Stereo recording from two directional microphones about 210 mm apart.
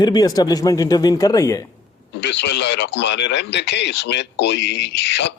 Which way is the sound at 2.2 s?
55° left (ahead or behind).